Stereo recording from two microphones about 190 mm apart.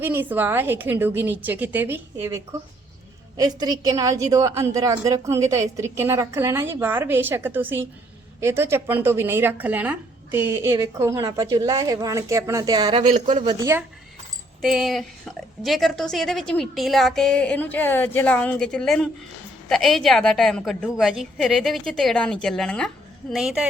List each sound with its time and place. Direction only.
0.0 s speech: 10° right (ahead or behind)
14.6 s a woman's voice: centre (ahead or behind)